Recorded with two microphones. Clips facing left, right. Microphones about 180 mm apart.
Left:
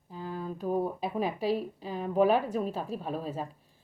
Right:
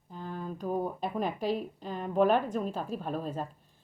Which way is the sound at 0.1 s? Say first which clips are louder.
Left 2 dB; 5° left (ahead or behind).